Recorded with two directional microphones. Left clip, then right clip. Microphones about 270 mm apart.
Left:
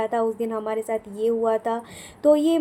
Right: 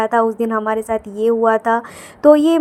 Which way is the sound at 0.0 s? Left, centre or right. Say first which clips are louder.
Right 8 dB; right.